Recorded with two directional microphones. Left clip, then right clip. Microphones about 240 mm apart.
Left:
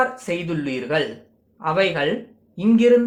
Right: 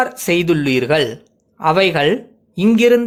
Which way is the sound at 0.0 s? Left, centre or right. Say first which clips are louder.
Right 6 dB; right.